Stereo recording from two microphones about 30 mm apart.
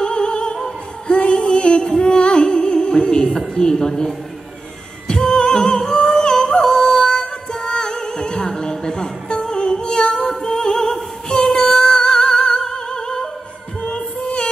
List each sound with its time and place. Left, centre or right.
0.0 s music: left
3.3 s a woman's voice: centre
5.0 s music: left
5.9 s yodeling: left
7.5 s music: left